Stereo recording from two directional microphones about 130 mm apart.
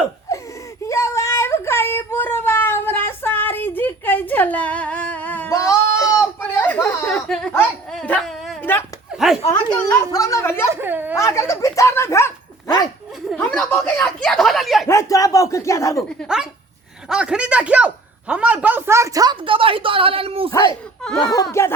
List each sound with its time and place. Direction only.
0.3 s a sound: 25° left (ahead or behind)
0.9 s child singing: 20° left (ahead or behind)
5.5 s a sound: 25° left (ahead or behind)
7.1 s a sound: 5° left (ahead or behind)
7.9 s dog: 5° left (ahead or behind)
9.1 s speech: 5° right (ahead or behind)
9.6 s speech: 25° left (ahead or behind)
10.7 s speech: 15° right (ahead or behind)
11.2 s speech: 20° left (ahead or behind)
13.3 s speech: 10° left (ahead or behind)
14.8 s speech: 25° left (ahead or behind)
17.1 s a man's voice: 5° right (ahead or behind); by 20.5 s 45° right (ahead or behind)
21.2 s speech: 30° left (ahead or behind)